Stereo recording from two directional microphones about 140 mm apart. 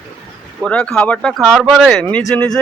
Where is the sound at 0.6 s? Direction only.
5° left (ahead or behind).